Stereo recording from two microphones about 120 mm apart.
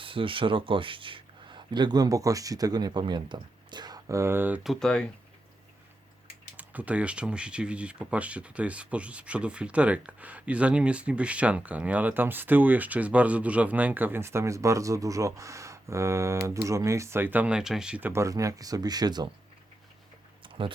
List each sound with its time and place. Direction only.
0.0 s speech: 45° right (ahead or behind); by 4.6 s 15° right (ahead or behind)
4.6 s speech: centre (ahead or behind)
6.6 s speech: 10° right (ahead or behind)
18.1 s speech: 25° right (ahead or behind)
20.4 s a sound: 45° right (ahead or behind)